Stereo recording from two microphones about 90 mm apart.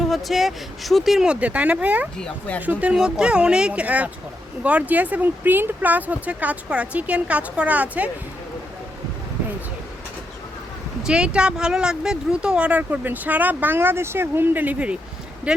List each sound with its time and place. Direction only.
0.0 s speech: centre (ahead or behind); by 2.0 s 15° right (ahead or behind)
2.1 s speech: 10° left (ahead or behind)
2.6 s speech: 15° right (ahead or behind)
11.0 s speech: 10° right (ahead or behind)